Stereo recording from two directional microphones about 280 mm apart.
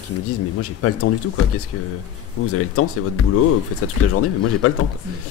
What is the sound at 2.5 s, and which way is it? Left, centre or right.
Speech, left.